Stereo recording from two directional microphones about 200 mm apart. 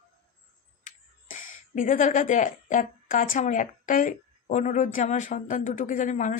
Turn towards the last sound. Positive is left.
turn(degrees=40)  # may be behind; listen again after turning